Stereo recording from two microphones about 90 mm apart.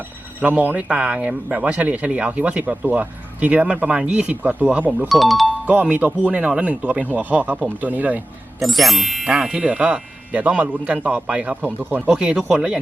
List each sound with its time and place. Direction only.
0.4 s speech: 15° right (ahead or behind)
5.0 s speech: centre (ahead or behind)
5.6 s speech: 15° right (ahead or behind)
8.5 s speech: centre (ahead or behind)